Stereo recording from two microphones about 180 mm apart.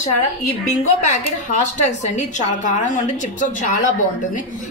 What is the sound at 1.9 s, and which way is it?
A woman's voice, 40° left (ahead or behind).